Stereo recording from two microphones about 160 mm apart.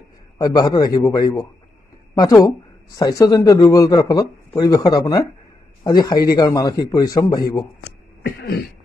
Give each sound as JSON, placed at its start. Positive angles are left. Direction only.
{"t": 0.4, "sound": "speech", "side_deg": 25}
{"t": 8.4, "sound": "cough", "side_deg": 90}